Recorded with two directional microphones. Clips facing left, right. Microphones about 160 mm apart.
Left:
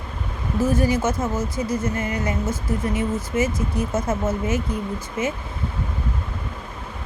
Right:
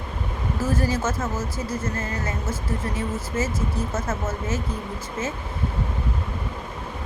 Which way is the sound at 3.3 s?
15° left (ahead or behind).